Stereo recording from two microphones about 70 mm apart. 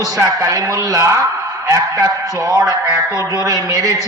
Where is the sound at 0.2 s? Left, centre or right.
Right.